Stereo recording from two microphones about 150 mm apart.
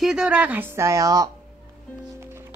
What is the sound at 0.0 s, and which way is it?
Speech, 5° right (ahead or behind).